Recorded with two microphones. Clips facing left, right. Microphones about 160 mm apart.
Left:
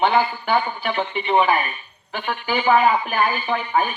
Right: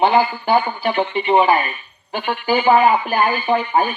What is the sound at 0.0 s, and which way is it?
A woman's voice, 35° right (ahead or behind).